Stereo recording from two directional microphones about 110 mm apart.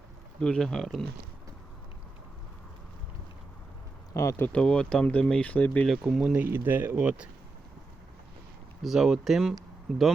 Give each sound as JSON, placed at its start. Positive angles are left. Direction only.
{"t": 0.3, "sound": "speech", "side_deg": 5}
{"t": 4.1, "sound": "speech", "side_deg": 25}
{"t": 4.4, "sound": "speech", "side_deg": 10}
{"t": 5.9, "sound": "speech", "side_deg": 0}
{"t": 6.4, "sound": "speech", "side_deg": -15}
{"t": 8.8, "sound": "speech", "side_deg": -5}